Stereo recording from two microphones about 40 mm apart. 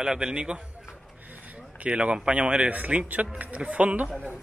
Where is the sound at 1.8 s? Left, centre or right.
Right.